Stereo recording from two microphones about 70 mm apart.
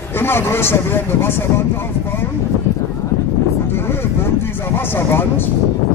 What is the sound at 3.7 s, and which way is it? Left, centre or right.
Speech, left.